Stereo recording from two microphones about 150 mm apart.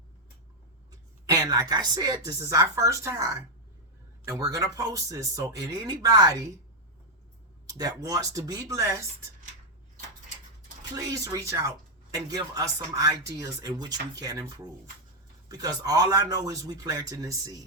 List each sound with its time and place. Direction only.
0.9 s speech: 25° right (ahead or behind)
7.7 s speech: 25° right (ahead or behind)
10.9 s speech: 25° right (ahead or behind)